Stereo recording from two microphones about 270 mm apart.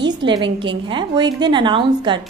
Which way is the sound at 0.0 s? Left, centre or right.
Centre.